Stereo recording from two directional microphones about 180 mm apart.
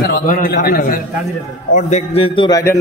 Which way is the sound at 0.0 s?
50° left (ahead or behind).